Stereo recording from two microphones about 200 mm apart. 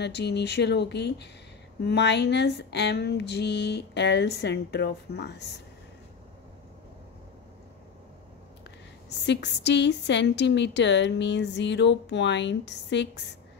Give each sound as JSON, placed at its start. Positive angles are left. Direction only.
{"t": 0.0, "sound": "a woman's voice", "side_deg": 55}
{"t": 9.2, "sound": "a woman's voice", "side_deg": 60}